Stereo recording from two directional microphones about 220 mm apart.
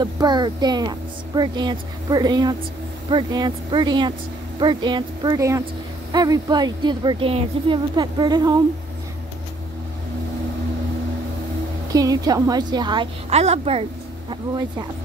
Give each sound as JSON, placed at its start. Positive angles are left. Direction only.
{"t": 0.0, "sound": "speech", "side_deg": -20}
{"t": 11.9, "sound": "speech", "side_deg": -15}